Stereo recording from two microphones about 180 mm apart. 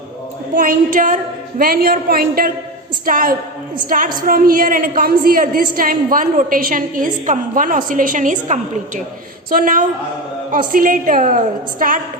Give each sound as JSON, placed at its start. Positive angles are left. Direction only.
{"t": 0.5, "sound": "a woman's voice", "side_deg": -50}